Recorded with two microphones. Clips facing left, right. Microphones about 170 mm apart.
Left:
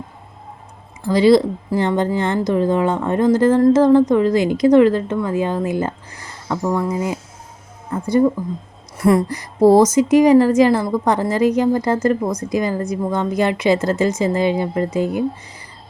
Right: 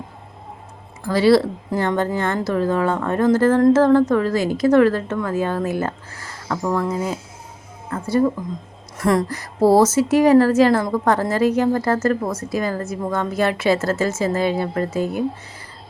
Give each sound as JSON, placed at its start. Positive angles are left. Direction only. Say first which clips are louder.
{"t": 1.0, "sound": "a woman's voice", "louder": "left 2 dB", "side_deg": 15}